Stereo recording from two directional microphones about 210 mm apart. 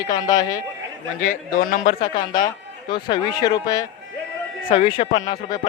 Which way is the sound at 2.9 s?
25° left (ahead or behind).